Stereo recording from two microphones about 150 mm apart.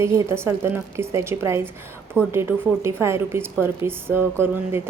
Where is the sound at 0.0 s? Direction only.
20° right (ahead or behind).